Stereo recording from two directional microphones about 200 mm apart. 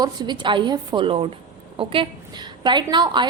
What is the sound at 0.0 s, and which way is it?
A woman's voice, 20° right (ahead or behind).